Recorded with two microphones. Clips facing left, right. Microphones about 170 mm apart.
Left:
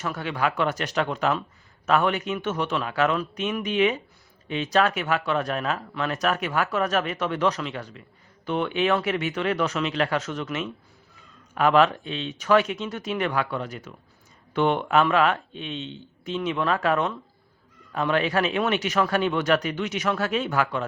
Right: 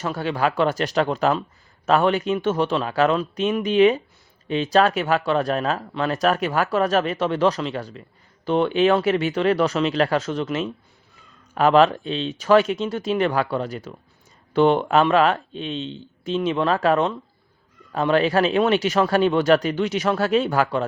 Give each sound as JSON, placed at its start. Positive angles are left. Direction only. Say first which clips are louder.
{"t": 0.0, "sound": "speech", "louder": "right 4 dB", "side_deg": -30}